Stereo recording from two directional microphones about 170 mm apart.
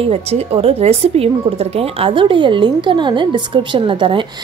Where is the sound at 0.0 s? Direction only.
40° right (ahead or behind).